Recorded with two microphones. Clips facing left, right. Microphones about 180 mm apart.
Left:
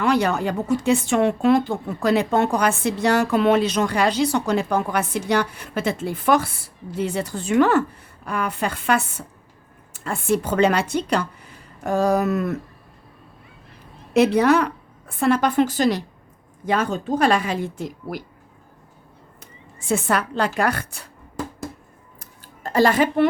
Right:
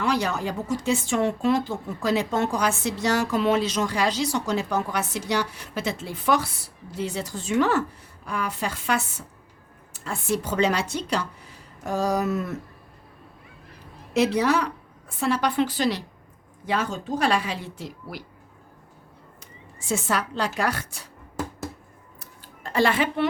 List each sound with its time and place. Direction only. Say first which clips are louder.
0.0 s speech: left 5 dB; 60° left (ahead or behind)
14.1 s a woman's voice: left 5 dB; 60° left (ahead or behind)
19.4 s a woman's voice: left 2 dB; 55° left (ahead or behind)
22.2 s a sound: left 6 dB; 40° left (ahead or behind)